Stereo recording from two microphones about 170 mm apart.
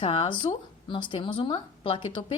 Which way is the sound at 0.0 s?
30° left (ahead or behind).